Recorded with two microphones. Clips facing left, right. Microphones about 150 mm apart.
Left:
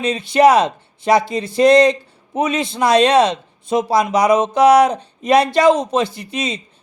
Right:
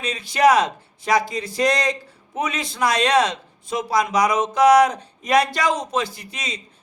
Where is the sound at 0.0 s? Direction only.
25° left (ahead or behind).